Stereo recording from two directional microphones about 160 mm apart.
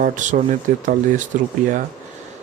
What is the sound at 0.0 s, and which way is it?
Speech, 55° right (ahead or behind).